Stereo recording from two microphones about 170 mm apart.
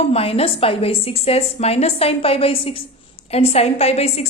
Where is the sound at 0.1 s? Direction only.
35° left (ahead or behind).